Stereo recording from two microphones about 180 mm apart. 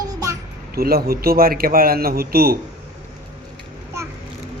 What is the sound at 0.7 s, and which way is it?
Speech, 60° right (ahead or behind).